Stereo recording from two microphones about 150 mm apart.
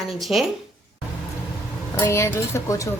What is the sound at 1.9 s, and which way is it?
Speech, 15° left (ahead or behind).